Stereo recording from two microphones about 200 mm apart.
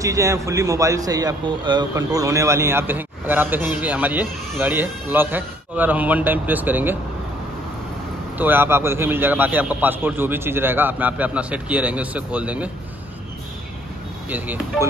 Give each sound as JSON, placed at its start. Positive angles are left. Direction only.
{"t": 0.0, "sound": "a man's voice", "side_deg": -15}
{"t": 8.4, "sound": "a man's voice", "side_deg": -10}
{"t": 14.3, "sound": "a man's voice", "side_deg": -10}